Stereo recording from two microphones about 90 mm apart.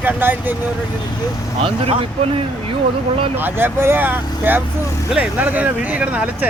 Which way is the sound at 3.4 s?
25° right (ahead or behind).